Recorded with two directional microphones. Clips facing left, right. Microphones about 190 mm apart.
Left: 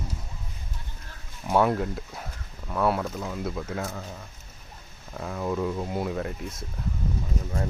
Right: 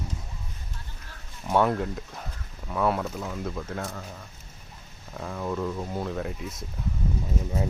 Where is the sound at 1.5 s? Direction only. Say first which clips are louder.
Left 1 dB; 5° left (ahead or behind).